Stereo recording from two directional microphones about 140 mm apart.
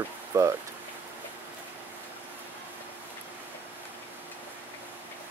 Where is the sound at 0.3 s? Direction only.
20° right (ahead or behind).